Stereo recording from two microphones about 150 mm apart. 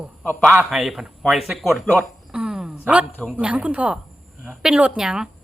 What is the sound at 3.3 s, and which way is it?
Speech, 10° right (ahead or behind).